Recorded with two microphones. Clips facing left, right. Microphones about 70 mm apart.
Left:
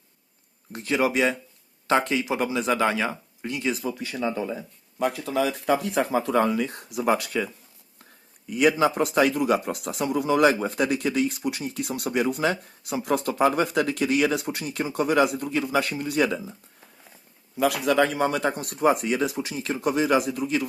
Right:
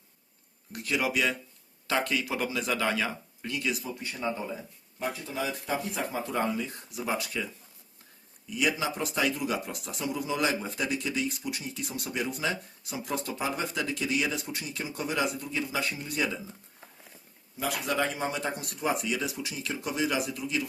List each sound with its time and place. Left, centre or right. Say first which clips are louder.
0.7 s speech: left 6 dB; left
3.8 s speech: left 5 dB; left
17.6 s speech: left 8 dB; left